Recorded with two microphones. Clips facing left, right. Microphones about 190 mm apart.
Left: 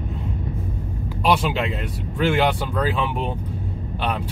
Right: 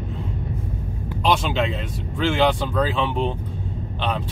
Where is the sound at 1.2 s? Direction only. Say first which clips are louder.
Even; 5° left (ahead or behind).